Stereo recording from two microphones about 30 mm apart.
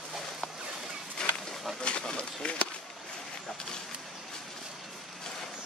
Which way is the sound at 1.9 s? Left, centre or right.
Left.